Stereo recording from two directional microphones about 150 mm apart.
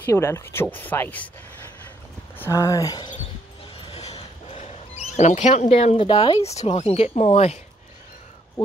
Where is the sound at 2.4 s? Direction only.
20° left (ahead or behind).